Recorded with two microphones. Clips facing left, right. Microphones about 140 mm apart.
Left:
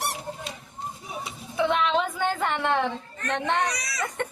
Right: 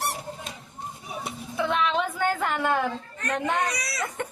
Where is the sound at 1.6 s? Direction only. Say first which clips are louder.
Left 2 dB; centre (ahead or behind).